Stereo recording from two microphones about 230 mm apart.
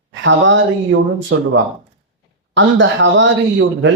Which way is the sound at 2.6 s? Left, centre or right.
Right.